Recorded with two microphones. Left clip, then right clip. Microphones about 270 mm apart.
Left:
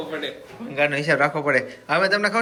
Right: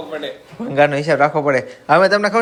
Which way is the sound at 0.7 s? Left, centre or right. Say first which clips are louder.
Right 6 dB; right.